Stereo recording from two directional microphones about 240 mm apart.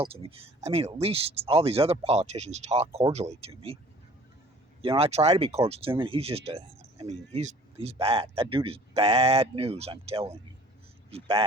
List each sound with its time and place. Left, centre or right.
0.0 s speech: right
4.8 s speech: right